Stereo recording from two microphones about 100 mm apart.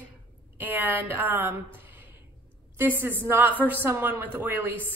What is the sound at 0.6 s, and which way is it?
A woman's voice, 20° right (ahead or behind).